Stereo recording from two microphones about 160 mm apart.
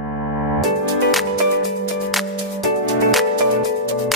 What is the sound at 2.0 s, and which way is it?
Music, centre (ahead or behind).